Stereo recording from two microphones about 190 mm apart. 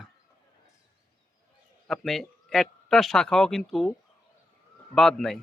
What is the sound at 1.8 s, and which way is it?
A man's voice, centre (ahead or behind).